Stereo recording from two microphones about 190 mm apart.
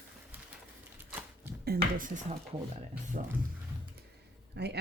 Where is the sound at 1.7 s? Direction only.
45° right (ahead or behind).